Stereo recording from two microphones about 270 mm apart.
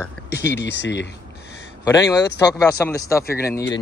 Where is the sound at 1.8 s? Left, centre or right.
Centre.